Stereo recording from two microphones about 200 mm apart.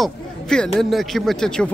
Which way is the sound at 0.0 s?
Centre (ahead or behind).